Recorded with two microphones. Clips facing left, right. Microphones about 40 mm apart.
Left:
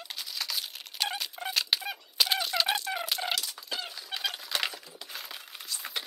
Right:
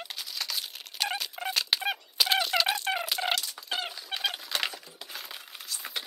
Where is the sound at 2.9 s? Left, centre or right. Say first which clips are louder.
Right 4 dB; right.